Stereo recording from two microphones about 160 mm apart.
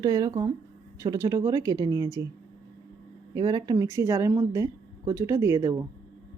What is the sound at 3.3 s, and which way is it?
A woman's voice, 25° right (ahead or behind).